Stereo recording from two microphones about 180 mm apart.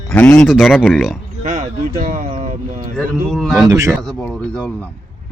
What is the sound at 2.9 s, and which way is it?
Speech, centre (ahead or behind).